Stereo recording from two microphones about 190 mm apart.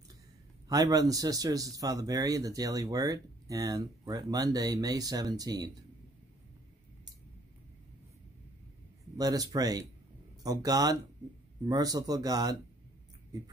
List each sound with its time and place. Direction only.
0.7 s speech: 20° right (ahead or behind)
9.1 s speech: 20° right (ahead or behind)